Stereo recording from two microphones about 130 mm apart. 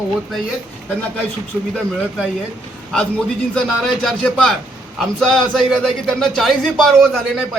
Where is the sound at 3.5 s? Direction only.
5° left (ahead or behind).